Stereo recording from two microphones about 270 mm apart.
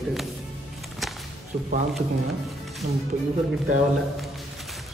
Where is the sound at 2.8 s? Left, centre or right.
Right.